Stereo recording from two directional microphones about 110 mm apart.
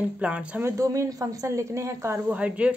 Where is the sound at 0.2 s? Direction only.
10° right (ahead or behind).